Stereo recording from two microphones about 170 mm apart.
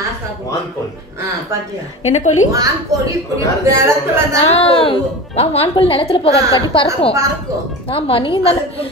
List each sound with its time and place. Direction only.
2.0 s a woman's voice: 45° left (ahead or behind)
2.5 s a woman's voice: 20° right (ahead or behind)
4.4 s a woman's voice: 35° left (ahead or behind)